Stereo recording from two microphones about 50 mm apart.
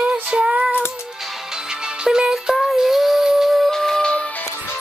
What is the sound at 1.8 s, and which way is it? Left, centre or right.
Music, centre.